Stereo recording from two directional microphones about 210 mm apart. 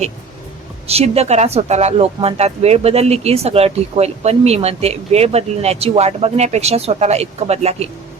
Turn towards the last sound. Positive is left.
turn(degrees=-30)  # may be behind; listen again after turning